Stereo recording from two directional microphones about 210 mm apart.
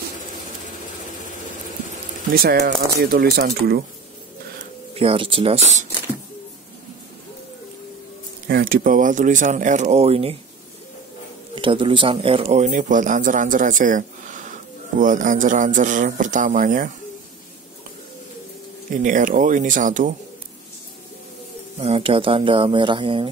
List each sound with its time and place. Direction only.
2.3 s speech: 50° right (ahead or behind)
4.9 s speech: 25° right (ahead or behind)
8.5 s speech: 45° right (ahead or behind); by 10.3 s 30° right (ahead or behind)
11.5 s speech: 25° right (ahead or behind); by 16.9 s 40° right (ahead or behind)
19.0 s speech: 40° right (ahead or behind)
21.7 s speech: 30° right (ahead or behind)